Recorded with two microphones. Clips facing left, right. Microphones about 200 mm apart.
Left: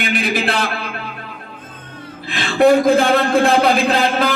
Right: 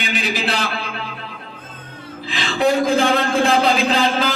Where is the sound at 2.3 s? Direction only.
55° left (ahead or behind).